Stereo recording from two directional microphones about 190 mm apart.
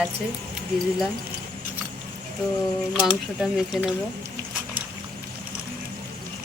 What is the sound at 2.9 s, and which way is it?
Speech, centre (ahead or behind).